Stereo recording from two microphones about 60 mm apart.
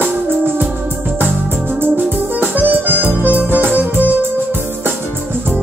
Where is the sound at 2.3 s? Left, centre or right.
Right.